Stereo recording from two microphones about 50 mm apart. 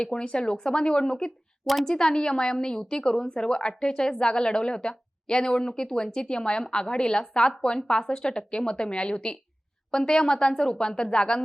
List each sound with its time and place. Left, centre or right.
0.0 s a woman's voice: centre
1.6 s a woman's voice: centre
1.9 s a woman's voice: centre